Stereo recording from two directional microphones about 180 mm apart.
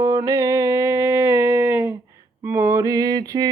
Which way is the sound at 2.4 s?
10° right (ahead or behind).